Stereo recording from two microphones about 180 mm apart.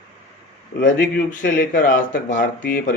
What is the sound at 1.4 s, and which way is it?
Speech, 70° left (ahead or behind).